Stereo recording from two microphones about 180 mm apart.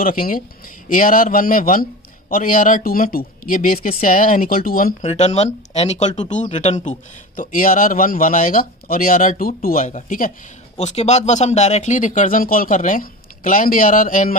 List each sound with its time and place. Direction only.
0.0 s a man's voice: 50° left (ahead or behind)
5.0 s a man's voice: 35° left (ahead or behind)